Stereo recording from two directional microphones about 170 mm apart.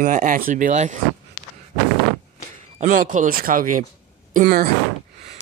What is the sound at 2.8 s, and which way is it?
Speech, 50° right (ahead or behind).